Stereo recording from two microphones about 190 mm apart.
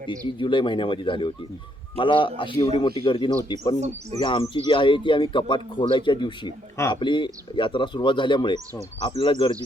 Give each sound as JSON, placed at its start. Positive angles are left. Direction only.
{"t": 0.3, "sound": "speech", "side_deg": 25}
{"t": 3.8, "sound": "speech", "side_deg": -35}
{"t": 4.2, "sound": "speech", "side_deg": 25}